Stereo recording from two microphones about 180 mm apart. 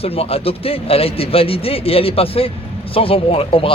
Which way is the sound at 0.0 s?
35° left (ahead or behind).